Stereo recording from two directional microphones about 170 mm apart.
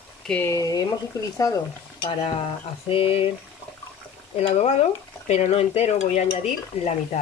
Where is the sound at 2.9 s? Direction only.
35° left (ahead or behind).